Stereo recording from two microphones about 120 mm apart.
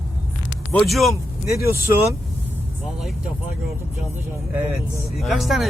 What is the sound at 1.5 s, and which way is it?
Speech, 25° right (ahead or behind).